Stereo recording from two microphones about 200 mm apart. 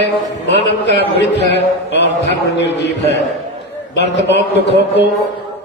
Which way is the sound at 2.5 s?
60° left (ahead or behind).